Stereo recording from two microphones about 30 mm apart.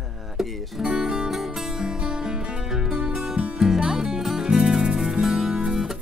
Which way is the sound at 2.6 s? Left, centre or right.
Centre.